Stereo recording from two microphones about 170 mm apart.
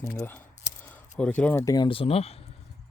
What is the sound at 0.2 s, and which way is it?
Speech, 10° left (ahead or behind).